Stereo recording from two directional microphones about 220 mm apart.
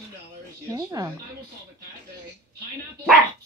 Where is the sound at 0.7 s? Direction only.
15° right (ahead or behind).